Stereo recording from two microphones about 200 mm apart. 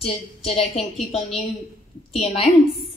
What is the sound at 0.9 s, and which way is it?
Speech, centre (ahead or behind).